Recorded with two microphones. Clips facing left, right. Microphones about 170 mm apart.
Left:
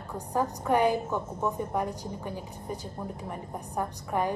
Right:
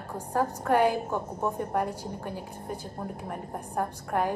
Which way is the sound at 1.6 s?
Centre (ahead or behind).